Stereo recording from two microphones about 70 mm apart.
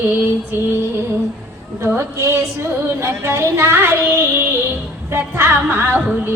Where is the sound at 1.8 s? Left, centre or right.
Right.